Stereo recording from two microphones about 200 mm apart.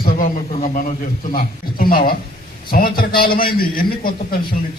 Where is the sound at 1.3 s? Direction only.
45° left (ahead or behind).